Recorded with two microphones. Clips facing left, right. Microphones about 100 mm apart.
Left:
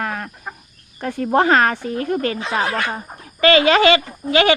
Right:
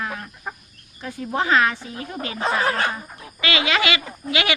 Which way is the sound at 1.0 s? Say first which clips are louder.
Left 8 dB; 60° left (ahead or behind).